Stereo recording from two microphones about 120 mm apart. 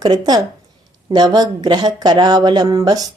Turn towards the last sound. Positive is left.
turn(degrees=-30)  # may be behind; listen again after turning